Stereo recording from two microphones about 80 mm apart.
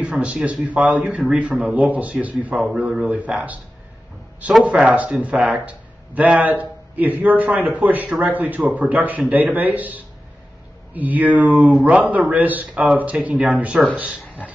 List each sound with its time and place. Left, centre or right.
0.0 s a man's voice: centre
4.6 s a man's voice: centre